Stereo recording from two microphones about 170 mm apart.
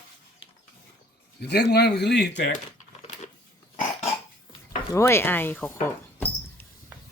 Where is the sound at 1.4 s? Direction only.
75° left (ahead or behind).